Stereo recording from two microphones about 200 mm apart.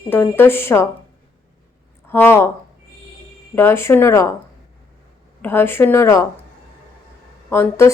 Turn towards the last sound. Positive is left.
turn(degrees=10)  # may be behind; listen again after turning